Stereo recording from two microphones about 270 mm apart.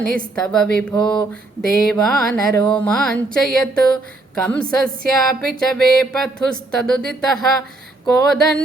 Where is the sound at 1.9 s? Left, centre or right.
Centre.